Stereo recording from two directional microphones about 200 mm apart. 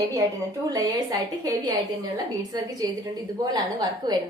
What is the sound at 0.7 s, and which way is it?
A woman's voice, 15° right (ahead or behind).